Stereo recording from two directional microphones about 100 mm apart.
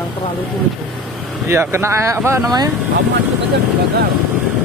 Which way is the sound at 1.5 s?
25° right (ahead or behind).